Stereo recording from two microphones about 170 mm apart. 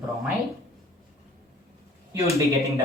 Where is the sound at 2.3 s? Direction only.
20° right (ahead or behind).